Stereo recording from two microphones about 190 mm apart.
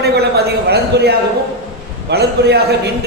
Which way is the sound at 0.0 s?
60° right (ahead or behind).